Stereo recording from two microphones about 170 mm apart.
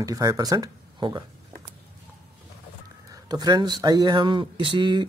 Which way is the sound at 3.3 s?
25° right (ahead or behind).